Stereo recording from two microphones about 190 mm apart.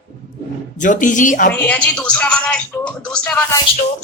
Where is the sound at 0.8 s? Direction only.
40° left (ahead or behind).